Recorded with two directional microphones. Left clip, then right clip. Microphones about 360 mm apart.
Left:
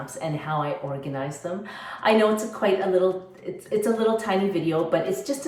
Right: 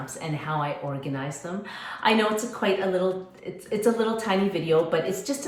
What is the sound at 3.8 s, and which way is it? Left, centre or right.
Speech, centre.